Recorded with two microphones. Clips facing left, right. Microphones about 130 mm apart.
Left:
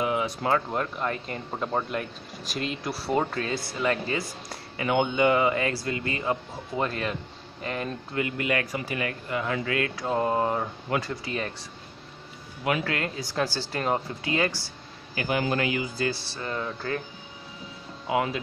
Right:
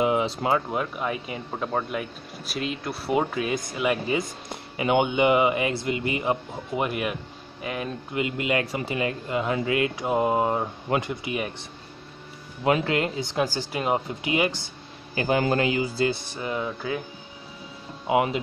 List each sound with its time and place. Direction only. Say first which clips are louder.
0.0 s a sound: right 3 dB; 20° right (ahead or behind)
0.7 s speech: right 1 dB; 5° right (ahead or behind)
8.1 s speech: right 2 dB; 20° right (ahead or behind)
12.6 s speech: right 5 dB; 25° right (ahead or behind)
15.1 s speech: right 4 dB; 30° right (ahead or behind)
16.3 s speech: right 3 dB; 15° right (ahead or behind)
18.0 s speech: right 4 dB; 20° right (ahead or behind)